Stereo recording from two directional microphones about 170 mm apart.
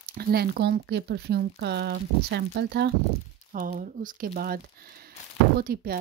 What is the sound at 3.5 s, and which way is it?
Speech, 50° right (ahead or behind).